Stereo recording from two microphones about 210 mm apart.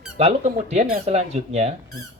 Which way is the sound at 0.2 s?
30° right (ahead or behind).